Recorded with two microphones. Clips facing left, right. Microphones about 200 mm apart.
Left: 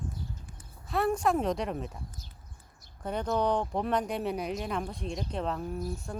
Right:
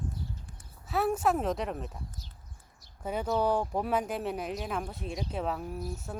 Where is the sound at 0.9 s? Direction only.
5° right (ahead or behind).